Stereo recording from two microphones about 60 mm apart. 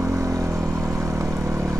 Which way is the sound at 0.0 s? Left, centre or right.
Right.